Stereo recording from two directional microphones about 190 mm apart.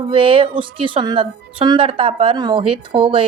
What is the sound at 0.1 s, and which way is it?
A woman's voice, 30° right (ahead or behind).